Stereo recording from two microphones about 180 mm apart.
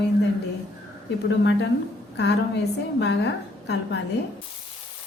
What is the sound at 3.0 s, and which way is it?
A woman's voice, 70° left (ahead or behind).